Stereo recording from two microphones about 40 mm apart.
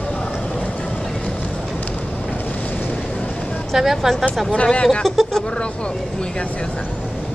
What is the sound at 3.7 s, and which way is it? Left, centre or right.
Speech, centre.